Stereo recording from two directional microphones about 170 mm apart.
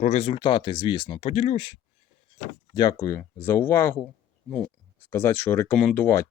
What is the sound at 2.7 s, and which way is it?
Speech, 20° left (ahead or behind).